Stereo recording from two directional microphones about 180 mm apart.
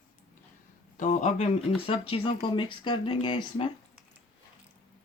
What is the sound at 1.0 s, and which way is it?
Speech, 40° left (ahead or behind).